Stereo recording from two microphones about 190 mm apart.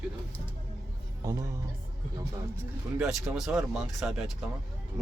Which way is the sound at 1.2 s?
15° right (ahead or behind).